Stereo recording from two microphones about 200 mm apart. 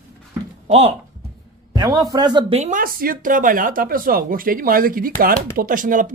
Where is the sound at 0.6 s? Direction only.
30° right (ahead or behind).